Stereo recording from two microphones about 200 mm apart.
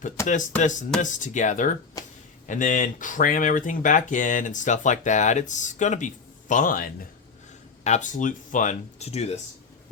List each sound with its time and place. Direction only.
0.6 s speech: 40° left (ahead or behind)